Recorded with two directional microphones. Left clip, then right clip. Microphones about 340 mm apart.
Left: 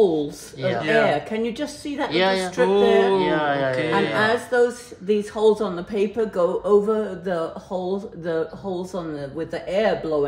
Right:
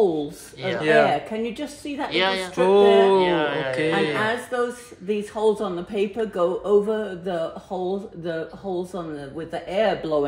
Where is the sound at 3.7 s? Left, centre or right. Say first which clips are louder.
Left 1 dB; centre.